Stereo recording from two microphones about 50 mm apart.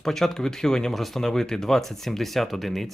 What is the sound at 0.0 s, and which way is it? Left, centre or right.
Speech, centre.